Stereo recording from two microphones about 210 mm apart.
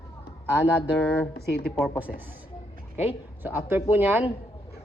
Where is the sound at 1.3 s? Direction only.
50° left (ahead or behind).